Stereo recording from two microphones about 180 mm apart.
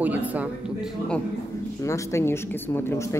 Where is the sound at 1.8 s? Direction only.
15° left (ahead or behind).